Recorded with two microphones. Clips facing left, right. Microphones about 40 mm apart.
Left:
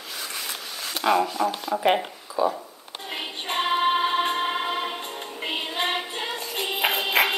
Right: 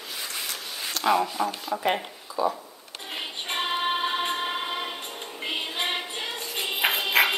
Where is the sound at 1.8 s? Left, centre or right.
Centre.